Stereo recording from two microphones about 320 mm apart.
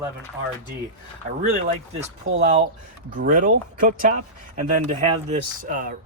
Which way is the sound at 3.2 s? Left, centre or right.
Right.